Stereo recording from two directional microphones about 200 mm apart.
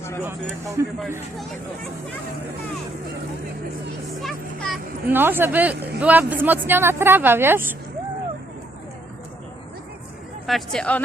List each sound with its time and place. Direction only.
0.8 s speech: 15° right (ahead or behind)
4.2 s a child's voice: centre (ahead or behind)
5.1 s speech: 10° right (ahead or behind)
10.4 s a child's voice: centre (ahead or behind)